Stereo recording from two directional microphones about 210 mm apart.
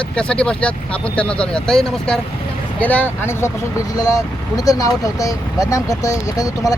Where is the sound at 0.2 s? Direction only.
5° left (ahead or behind).